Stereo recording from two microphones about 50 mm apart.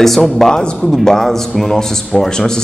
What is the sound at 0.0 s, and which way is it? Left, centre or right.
Speech, centre.